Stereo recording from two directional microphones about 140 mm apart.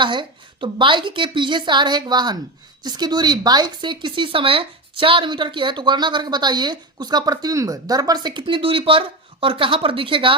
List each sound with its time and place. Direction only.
0.0 s speech: 35° right (ahead or behind)